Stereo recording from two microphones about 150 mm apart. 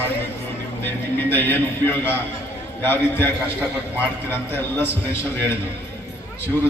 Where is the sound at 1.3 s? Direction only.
15° left (ahead or behind).